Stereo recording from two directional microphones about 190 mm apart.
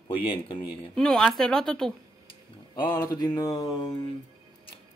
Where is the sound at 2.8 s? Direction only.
10° left (ahead or behind).